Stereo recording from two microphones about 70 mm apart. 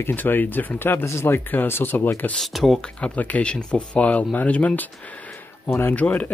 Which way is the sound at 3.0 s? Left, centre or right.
Left.